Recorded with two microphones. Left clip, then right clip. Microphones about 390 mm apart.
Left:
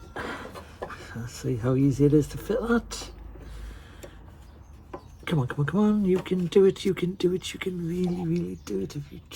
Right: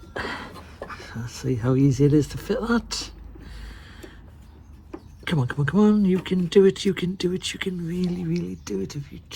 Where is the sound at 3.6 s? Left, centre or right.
Right.